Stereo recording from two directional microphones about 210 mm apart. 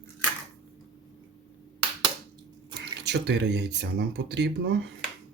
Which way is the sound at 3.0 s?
55° right (ahead or behind).